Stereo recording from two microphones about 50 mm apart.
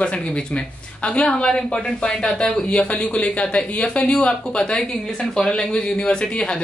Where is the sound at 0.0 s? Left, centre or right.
Left.